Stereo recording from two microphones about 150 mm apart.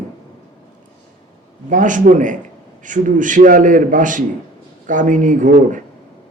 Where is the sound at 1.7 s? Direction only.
60° right (ahead or behind).